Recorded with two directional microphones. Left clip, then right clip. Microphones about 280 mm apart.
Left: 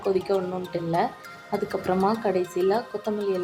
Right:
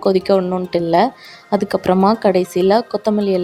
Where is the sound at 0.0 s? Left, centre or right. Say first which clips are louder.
Right 10 dB; right.